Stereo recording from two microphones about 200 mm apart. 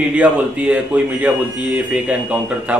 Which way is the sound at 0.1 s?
5° right (ahead or behind).